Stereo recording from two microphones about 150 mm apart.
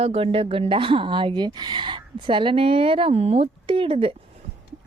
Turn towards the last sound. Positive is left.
turn(degrees=-35)  # may be behind; listen again after turning